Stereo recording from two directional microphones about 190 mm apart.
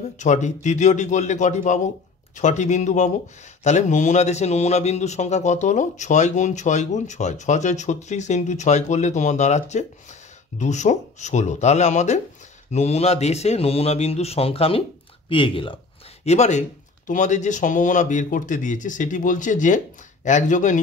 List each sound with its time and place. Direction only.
0.2 s a man's voice: 40° left (ahead or behind)
16.3 s a man's voice: 35° left (ahead or behind)